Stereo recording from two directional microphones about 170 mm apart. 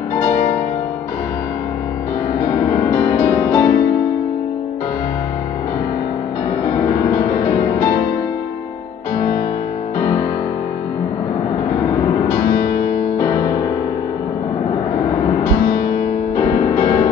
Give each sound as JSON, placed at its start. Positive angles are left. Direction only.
{"t": 3.0, "sound": "music", "side_deg": 15}
{"t": 16.3, "sound": "music", "side_deg": 20}